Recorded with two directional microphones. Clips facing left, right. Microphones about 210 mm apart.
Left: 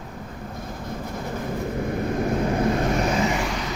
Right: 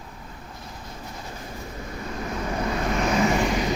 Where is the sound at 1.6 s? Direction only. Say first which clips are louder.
Left 11 dB; 55° left (ahead or behind).